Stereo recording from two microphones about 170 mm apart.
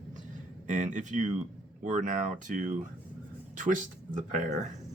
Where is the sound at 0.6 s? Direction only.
45° right (ahead or behind).